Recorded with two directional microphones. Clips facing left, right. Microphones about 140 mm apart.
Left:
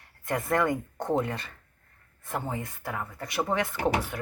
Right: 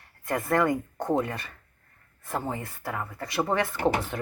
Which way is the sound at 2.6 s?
15° left (ahead or behind).